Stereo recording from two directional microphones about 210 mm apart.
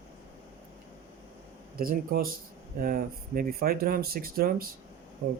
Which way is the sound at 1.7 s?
45° right (ahead or behind).